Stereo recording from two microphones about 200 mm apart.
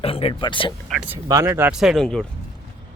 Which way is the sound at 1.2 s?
15° right (ahead or behind).